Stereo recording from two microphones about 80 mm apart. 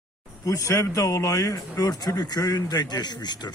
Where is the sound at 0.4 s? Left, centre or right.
Left.